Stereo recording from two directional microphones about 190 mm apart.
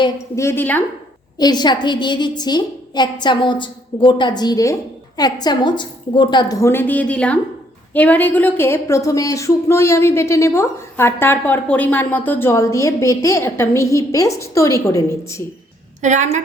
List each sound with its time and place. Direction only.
0.0 s a woman's voice: 15° left (ahead or behind)
1.4 s a woman's voice: 20° left (ahead or behind)
16.0 s a woman's voice: 40° right (ahead or behind)